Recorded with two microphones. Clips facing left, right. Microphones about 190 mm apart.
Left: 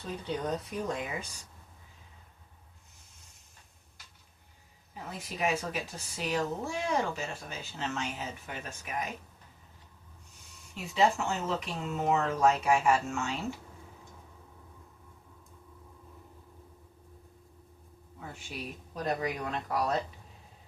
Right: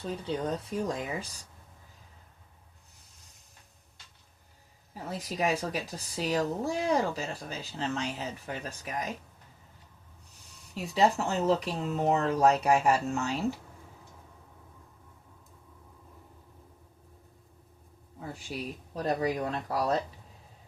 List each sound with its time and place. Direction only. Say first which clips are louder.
0.3 s a woman's voice: even; 30° right (ahead or behind)
5.0 s a woman's voice: right 3 dB; 35° right (ahead or behind)
10.8 s a woman's voice: right 2 dB; 35° right (ahead or behind)
18.2 s a woman's voice: right 4 dB; 35° right (ahead or behind)